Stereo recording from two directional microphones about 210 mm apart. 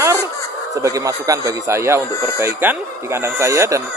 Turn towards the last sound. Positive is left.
turn(degrees=-15)  # may be behind; listen again after turning